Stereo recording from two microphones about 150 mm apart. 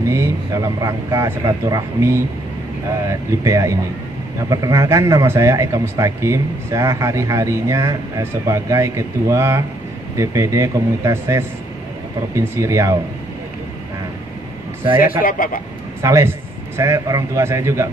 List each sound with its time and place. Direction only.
0.0 s a man's voice: 20° right (ahead or behind)
15.2 s a man's voice: 65° left (ahead or behind)
16.0 s a man's voice: 20° right (ahead or behind)